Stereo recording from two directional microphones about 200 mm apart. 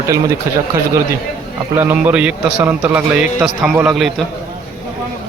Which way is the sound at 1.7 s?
10° right (ahead or behind).